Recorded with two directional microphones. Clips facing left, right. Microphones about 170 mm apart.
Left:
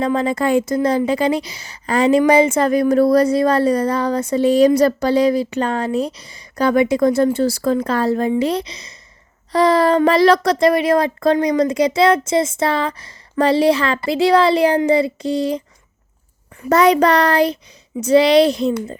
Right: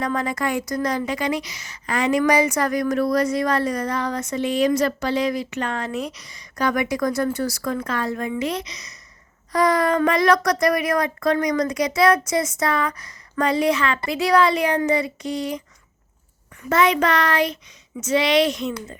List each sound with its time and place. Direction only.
0.0 s a woman's voice: 25° left (ahead or behind)